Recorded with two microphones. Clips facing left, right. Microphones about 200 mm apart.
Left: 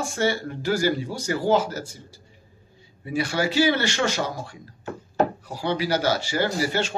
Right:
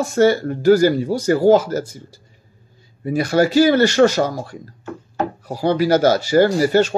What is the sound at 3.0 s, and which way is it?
Speech, 40° right (ahead or behind).